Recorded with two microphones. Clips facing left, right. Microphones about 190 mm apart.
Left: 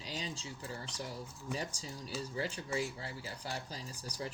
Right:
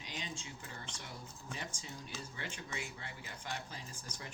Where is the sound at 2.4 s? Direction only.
35° left (ahead or behind).